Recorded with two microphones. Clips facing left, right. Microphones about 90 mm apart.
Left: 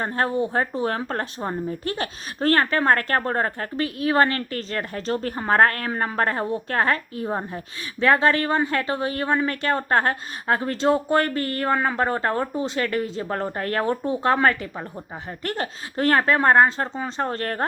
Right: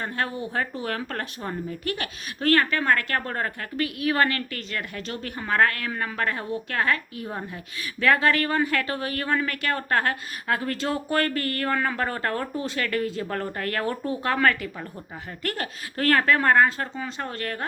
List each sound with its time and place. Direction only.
0.0 s speech: 35° left (ahead or behind)